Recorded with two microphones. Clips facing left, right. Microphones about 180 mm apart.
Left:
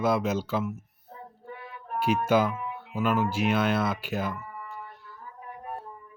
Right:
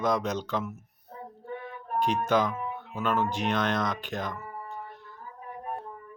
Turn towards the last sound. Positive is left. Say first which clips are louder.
# left 3 dB
turn(degrees=10)  # may be behind; listen again after turning